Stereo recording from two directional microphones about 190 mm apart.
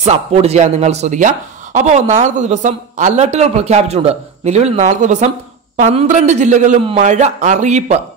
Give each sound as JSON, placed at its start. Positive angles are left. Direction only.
{"t": 0.0, "sound": "speech", "side_deg": -35}